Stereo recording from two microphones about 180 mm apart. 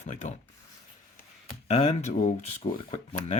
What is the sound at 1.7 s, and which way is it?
Speech, 35° left (ahead or behind).